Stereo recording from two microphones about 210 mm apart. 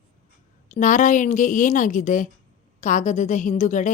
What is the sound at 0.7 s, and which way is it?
A woman's voice, 40° left (ahead or behind).